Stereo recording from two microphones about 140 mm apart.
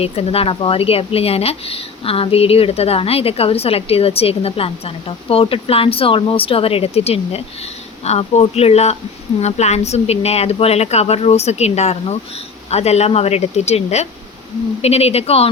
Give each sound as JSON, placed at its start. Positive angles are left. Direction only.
{"t": 0.0, "sound": "speech", "side_deg": 45}